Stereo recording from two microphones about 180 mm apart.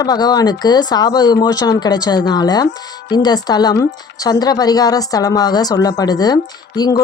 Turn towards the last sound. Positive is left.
turn(degrees=20)  # may be behind; listen again after turning